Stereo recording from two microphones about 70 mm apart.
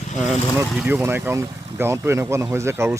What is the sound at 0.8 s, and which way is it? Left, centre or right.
Speech, right.